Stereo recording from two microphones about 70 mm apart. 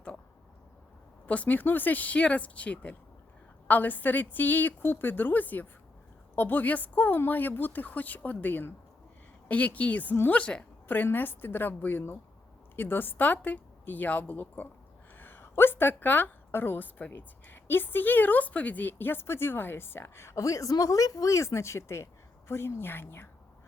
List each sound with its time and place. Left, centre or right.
1.3 s a woman's voice: left
10.8 s a woman's voice: left